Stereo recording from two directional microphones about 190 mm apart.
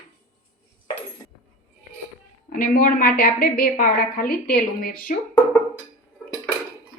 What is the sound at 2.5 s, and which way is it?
A woman's voice, 50° left (ahead or behind).